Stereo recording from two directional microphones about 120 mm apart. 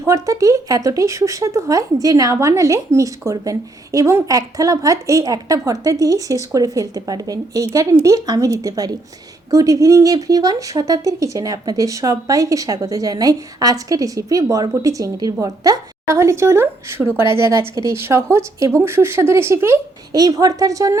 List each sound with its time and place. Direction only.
0.0 s speech: 30° right (ahead or behind)